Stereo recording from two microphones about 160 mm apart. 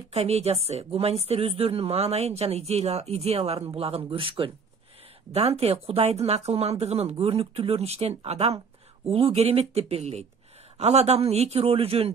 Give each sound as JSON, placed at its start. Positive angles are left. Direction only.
{"t": 0.1, "sound": "speech", "side_deg": -40}